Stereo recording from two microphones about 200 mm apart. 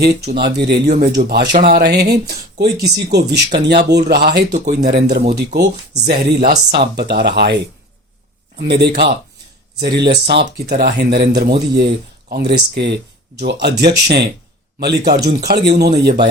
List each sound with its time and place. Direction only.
0.0 s speech: 55° right (ahead or behind)